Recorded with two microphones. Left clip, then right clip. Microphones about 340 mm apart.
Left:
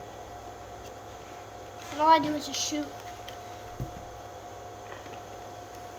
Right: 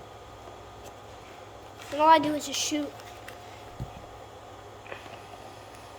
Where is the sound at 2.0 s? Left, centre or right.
Right.